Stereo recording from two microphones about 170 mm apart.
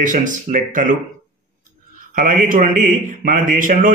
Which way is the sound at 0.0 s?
50° right (ahead or behind).